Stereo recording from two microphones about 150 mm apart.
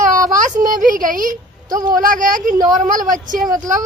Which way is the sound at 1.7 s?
25° right (ahead or behind).